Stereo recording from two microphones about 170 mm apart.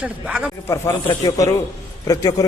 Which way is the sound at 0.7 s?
20° left (ahead or behind).